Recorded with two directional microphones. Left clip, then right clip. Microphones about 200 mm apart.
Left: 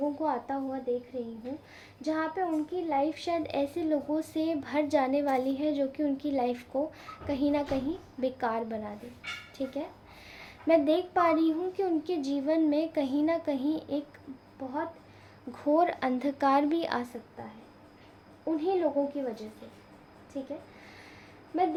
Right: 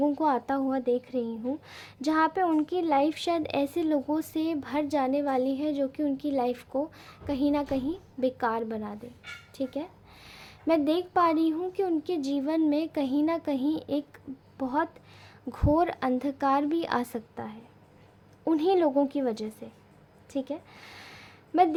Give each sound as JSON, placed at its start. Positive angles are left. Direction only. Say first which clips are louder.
{"t": 0.2, "sound": "a woman's voice", "louder": "right 5 dB", "side_deg": -50}
{"t": 15.5, "sound": "a woman's voice", "louder": "even", "side_deg": -35}
{"t": 18.4, "sound": "speech", "louder": "right 4 dB", "side_deg": -55}
{"t": 20.8, "sound": "a sound", "louder": "right 4 dB", "side_deg": -45}